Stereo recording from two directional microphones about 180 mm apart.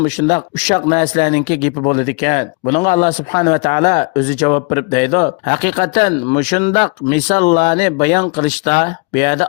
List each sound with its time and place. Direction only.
0.0 s speech: 40° left (ahead or behind)